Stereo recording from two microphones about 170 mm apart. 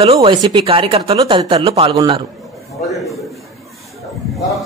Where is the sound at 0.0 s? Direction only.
35° right (ahead or behind).